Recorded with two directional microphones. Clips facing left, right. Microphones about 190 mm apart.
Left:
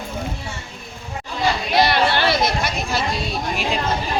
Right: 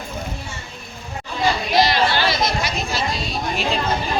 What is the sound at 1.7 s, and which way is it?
Chatter, 60° left (ahead or behind).